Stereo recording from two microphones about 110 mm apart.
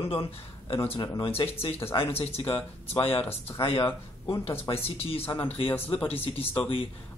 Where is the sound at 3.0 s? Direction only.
60° left (ahead or behind).